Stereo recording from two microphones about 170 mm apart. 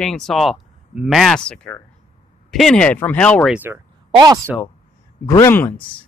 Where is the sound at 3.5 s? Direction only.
10° right (ahead or behind).